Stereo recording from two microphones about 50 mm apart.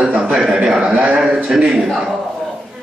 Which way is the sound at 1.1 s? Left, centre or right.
Centre.